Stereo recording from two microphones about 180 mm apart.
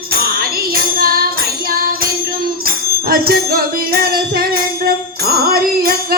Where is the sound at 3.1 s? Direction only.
55° right (ahead or behind).